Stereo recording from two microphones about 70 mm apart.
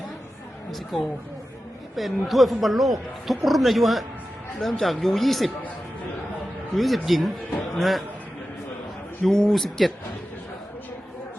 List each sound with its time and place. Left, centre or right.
0.9 s speech: centre
6.7 s speech: centre
9.2 s speech: centre